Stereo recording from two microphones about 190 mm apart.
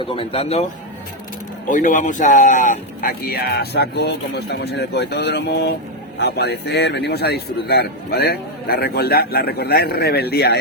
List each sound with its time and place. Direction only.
0.0 s speech: 25° left (ahead or behind)
1.7 s a man's voice: 45° left (ahead or behind); by 10.6 s 60° left (ahead or behind)